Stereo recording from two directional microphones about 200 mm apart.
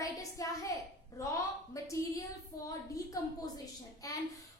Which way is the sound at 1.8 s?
15° left (ahead or behind).